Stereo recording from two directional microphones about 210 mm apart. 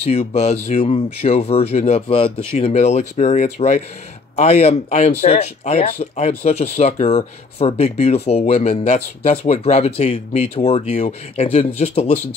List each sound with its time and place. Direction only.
0.0 s speech: 30° left (ahead or behind)